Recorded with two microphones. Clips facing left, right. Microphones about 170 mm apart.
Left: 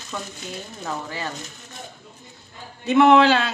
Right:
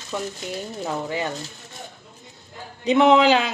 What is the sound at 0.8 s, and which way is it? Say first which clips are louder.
Speech: right 4 dB; 20° right (ahead or behind).